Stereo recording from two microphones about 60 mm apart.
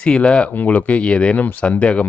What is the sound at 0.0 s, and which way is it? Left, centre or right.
Speech, centre.